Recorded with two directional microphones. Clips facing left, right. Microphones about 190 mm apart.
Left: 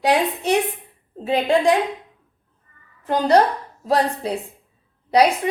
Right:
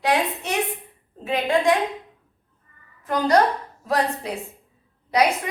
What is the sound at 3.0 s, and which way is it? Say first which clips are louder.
A woman's voice: left 3 dB; 30° left (ahead or behind).